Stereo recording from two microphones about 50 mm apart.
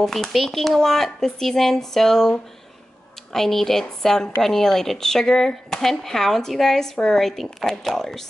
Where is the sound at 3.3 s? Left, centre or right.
Centre.